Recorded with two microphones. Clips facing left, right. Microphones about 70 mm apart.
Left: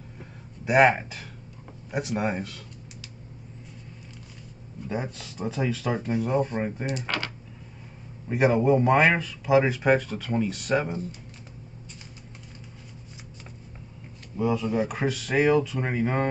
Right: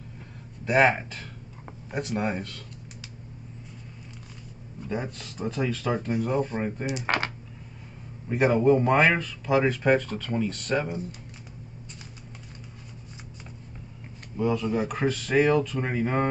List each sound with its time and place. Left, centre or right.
0.7 s speech: centre
4.8 s speech: centre
7.1 s speech: right
8.3 s speech: centre
14.3 s speech: centre